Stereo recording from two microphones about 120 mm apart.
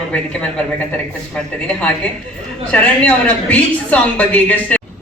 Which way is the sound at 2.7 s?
10° left (ahead or behind).